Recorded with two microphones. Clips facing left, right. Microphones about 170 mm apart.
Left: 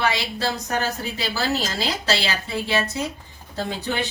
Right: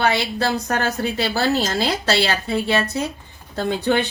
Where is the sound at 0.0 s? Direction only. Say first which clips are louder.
Right 4 dB; 60° right (ahead or behind).